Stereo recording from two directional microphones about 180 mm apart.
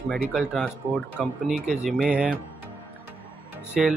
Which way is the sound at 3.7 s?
Centre (ahead or behind).